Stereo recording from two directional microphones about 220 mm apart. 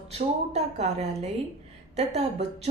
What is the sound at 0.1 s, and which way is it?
A woman's voice, 30° right (ahead or behind).